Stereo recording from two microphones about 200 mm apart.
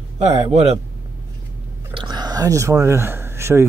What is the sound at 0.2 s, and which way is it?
Speech, 30° right (ahead or behind).